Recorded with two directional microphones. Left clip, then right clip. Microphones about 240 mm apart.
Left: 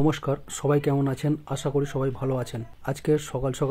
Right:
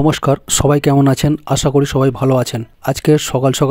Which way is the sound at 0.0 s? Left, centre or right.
Right.